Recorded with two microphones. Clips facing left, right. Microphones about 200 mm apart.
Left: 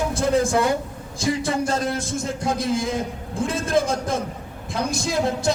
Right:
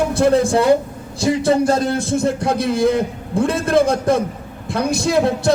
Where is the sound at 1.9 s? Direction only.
65° right (ahead or behind).